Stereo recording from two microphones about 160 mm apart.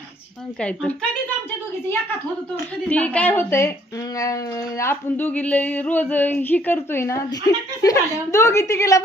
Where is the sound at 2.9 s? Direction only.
10° left (ahead or behind).